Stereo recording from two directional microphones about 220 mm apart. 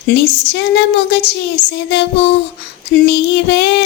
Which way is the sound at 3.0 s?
50° left (ahead or behind).